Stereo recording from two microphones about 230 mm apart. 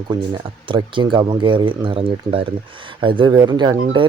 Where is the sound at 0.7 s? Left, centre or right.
Right.